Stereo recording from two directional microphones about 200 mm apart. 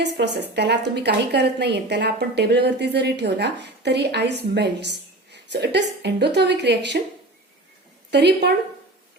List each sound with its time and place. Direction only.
0.0 s speech: 55° right (ahead or behind)
8.1 s speech: 55° right (ahead or behind)